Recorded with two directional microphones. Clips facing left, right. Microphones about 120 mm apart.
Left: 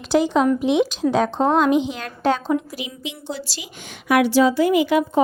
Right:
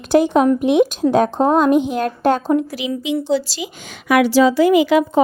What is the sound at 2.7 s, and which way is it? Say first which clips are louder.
A woman's voice: right 11 dB; 90° right.